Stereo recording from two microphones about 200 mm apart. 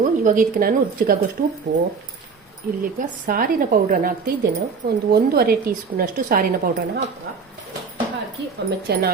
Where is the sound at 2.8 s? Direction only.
45° right (ahead or behind).